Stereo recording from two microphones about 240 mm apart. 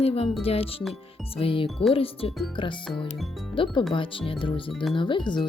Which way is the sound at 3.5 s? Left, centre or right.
Left.